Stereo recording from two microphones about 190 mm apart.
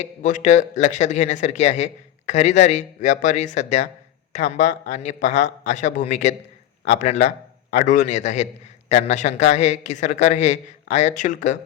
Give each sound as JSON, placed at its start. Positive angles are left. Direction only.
{"t": 0.0, "sound": "speech", "side_deg": 40}